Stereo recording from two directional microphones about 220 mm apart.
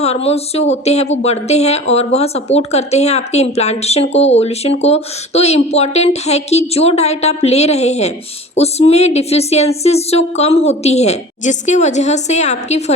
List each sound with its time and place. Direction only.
0.0 s speech: 30° left (ahead or behind)